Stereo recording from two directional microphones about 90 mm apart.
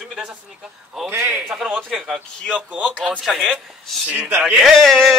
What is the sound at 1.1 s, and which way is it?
Speech, 20° right (ahead or behind).